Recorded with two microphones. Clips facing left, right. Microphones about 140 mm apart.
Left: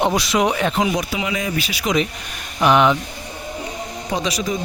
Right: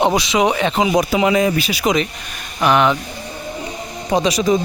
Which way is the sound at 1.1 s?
45° right (ahead or behind).